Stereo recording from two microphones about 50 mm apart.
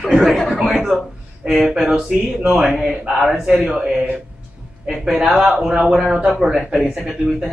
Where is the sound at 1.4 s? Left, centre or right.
Centre.